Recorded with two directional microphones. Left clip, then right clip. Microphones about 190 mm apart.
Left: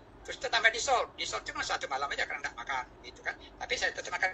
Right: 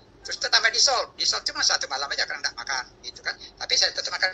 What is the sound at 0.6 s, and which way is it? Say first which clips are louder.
A man's voice: right 2 dB; 20° right (ahead or behind).